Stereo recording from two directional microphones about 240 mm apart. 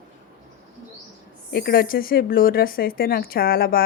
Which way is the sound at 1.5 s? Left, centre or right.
Left.